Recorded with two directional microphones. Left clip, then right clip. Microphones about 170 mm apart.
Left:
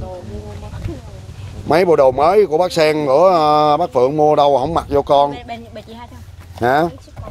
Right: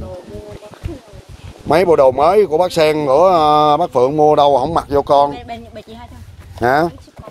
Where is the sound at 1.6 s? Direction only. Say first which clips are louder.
Right 1 dB; 10° right (ahead or behind).